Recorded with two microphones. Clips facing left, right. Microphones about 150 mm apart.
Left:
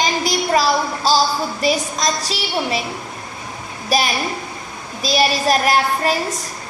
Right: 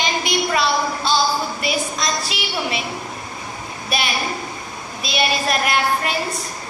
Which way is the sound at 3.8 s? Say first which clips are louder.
Left 4 dB; 40° left (ahead or behind).